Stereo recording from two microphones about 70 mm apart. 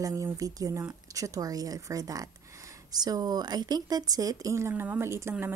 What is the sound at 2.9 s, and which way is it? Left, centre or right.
Speech, right.